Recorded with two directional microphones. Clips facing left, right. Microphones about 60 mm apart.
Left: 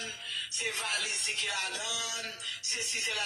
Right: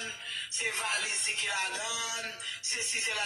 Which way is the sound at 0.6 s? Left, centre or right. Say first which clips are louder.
Right 2 dB; right.